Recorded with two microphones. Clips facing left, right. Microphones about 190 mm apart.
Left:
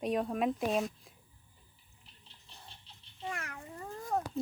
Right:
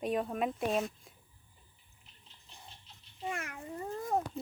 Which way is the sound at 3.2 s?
20° right (ahead or behind).